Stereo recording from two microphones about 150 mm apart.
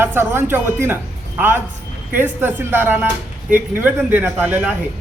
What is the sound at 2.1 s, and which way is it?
Speech, 15° right (ahead or behind).